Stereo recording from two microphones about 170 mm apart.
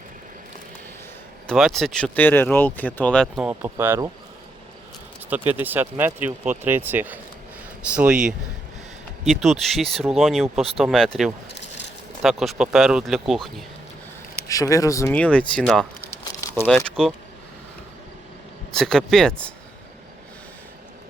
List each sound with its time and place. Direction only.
1.5 s speech: centre (ahead or behind)
3.4 s speech: 10° right (ahead or behind)
5.5 s speech: 10° right (ahead or behind)
11.4 s a sound: 90° left
12.2 s speech: centre (ahead or behind)
14.4 s speech: 20° left (ahead or behind)
15.1 s speech: 10° left (ahead or behind)
18.8 s speech: 5° left (ahead or behind)